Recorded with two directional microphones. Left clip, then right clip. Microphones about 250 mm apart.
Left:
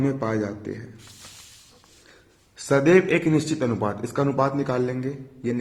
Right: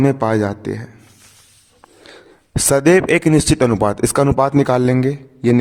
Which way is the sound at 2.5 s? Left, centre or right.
Right.